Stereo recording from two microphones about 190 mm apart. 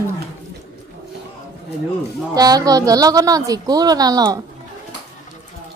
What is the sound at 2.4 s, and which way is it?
A woman's voice, 20° right (ahead or behind).